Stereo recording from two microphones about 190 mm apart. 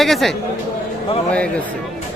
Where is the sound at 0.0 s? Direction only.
Centre (ahead or behind).